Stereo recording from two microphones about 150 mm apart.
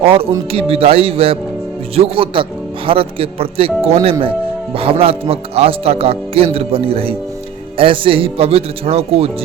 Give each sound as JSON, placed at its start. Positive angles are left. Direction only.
{"t": 0.0, "sound": "speech", "side_deg": -40}